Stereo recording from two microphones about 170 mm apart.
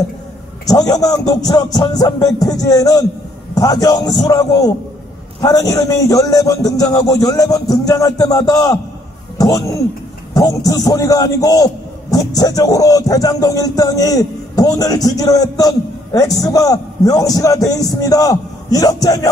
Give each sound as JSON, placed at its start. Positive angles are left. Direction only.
{"t": 0.7, "sound": "a man's voice", "side_deg": 20}